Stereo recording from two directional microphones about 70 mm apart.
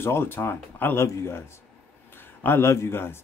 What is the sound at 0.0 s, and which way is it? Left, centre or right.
Speech, left.